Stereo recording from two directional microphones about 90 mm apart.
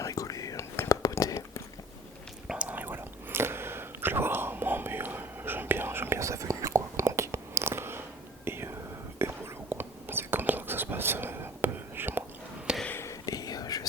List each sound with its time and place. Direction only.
0.0 s whispering: 40° left (ahead or behind)
2.5 s whispering: 15° right (ahead or behind)
13.0 s whispering: 40° left (ahead or behind)